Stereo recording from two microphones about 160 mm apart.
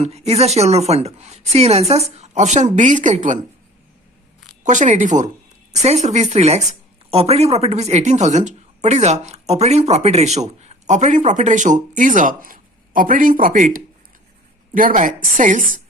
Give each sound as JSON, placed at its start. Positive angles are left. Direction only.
{"t": 0.0, "sound": "a woman's voice", "side_deg": -40}
{"t": 4.6, "sound": "a woman's voice", "side_deg": -50}